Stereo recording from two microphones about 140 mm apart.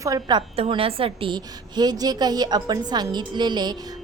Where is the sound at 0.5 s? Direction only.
45° right (ahead or behind).